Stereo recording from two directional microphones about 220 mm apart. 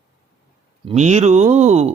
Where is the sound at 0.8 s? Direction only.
30° right (ahead or behind).